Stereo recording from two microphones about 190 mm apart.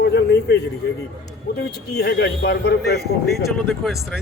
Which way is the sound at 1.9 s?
60° left (ahead or behind).